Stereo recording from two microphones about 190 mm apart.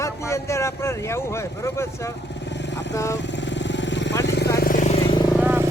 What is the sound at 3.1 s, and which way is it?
Vehicle, 70° left (ahead or behind).